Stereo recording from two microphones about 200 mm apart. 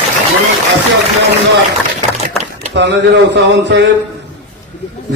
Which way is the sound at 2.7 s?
60° right (ahead or behind).